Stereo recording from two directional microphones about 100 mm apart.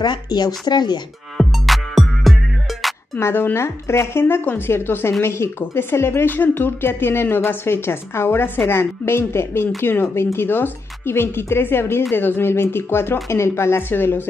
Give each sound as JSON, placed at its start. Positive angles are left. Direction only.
{"t": 0.0, "sound": "speech", "side_deg": 45}
{"t": 1.4, "sound": "music", "side_deg": 0}
{"t": 3.2, "sound": "speech", "side_deg": 25}